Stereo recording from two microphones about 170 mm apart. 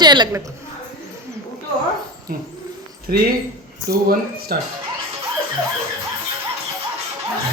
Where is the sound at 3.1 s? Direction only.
60° right (ahead or behind).